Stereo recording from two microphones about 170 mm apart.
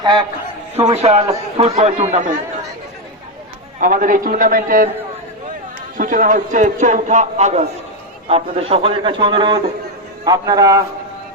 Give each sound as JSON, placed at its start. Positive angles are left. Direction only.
{"t": 0.0, "sound": "a man's voice", "side_deg": -30}
{"t": 0.9, "sound": "speech", "side_deg": -40}
{"t": 3.8, "sound": "a man's voice", "side_deg": -55}
{"t": 6.0, "sound": "a man's voice", "side_deg": -50}